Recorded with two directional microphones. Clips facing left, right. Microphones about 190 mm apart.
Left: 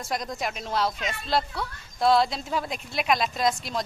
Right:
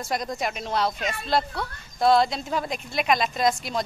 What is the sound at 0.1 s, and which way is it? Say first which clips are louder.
Speech: right 2 dB; centre (ahead or behind).